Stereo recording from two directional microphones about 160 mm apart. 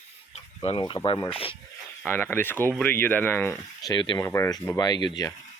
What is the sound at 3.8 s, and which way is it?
Speech, 25° left (ahead or behind).